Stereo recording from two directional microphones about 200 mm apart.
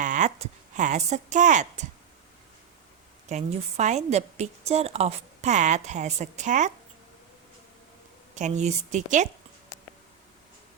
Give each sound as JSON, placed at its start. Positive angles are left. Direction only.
{"t": 0.0, "sound": "a woman's voice", "side_deg": -35}
{"t": 3.2, "sound": "a woman's voice", "side_deg": -35}
{"t": 8.4, "sound": "a woman's voice", "side_deg": -35}